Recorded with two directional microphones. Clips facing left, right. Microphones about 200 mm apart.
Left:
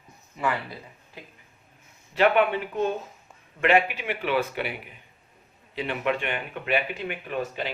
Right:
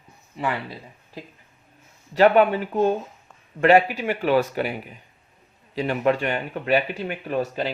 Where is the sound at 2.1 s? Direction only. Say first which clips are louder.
Right 5 dB; 40° right (ahead or behind).